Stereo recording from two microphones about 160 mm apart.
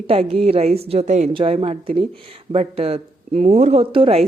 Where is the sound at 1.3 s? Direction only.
35° right (ahead or behind).